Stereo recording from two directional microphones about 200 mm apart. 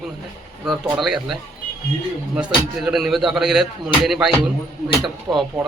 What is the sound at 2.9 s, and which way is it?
A man's voice, centre (ahead or behind).